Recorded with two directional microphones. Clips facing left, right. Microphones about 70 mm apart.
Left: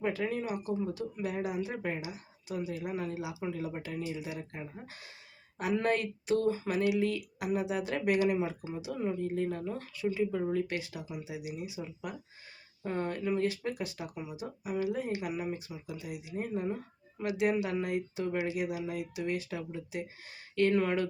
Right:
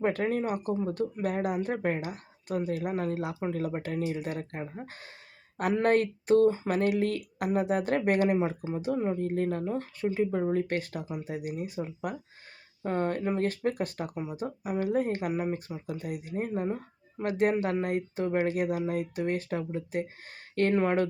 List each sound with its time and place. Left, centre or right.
0.0 s speech: right
4.8 s speech: right
9.2 s speech: right